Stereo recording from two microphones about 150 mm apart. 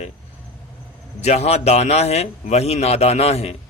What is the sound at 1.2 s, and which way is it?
A man's voice, 50° left (ahead or behind).